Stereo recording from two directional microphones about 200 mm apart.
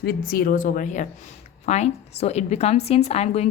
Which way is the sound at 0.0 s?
50° left (ahead or behind).